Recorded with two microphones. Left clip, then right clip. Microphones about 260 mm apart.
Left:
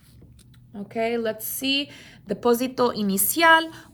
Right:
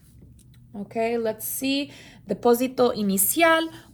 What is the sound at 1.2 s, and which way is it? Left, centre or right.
Speech, left.